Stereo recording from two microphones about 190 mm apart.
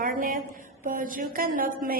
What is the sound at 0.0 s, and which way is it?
Mantra, 45° right (ahead or behind).